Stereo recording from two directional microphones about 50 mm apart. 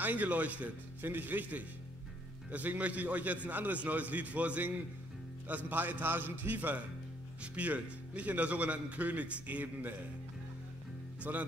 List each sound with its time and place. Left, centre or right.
0.0 s speech: right
11.3 s speech: right